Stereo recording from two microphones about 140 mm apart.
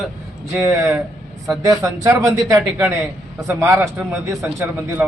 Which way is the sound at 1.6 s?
25° right (ahead or behind).